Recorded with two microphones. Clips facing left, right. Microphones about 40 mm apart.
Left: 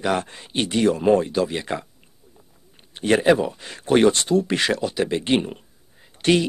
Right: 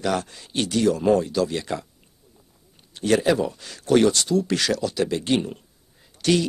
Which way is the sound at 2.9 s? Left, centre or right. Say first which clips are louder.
Left 3 dB; left.